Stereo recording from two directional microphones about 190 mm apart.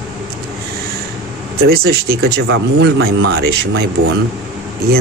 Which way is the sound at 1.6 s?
55° right (ahead or behind).